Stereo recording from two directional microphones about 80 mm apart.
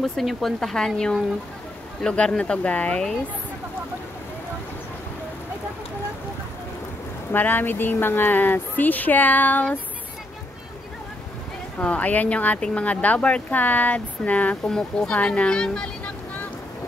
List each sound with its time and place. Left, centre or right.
0.0 s speech: centre
7.3 s speech: left
11.8 s speech: centre
14.7 s speech: centre